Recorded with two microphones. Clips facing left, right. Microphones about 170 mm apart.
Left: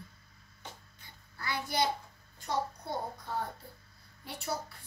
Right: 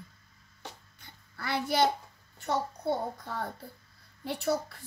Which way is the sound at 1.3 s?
70° right (ahead or behind).